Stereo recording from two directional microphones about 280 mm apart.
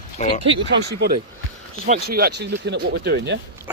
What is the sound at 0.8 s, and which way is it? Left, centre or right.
Speech, right.